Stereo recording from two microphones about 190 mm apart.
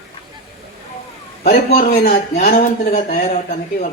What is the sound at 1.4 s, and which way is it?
Speech, 50° left (ahead or behind).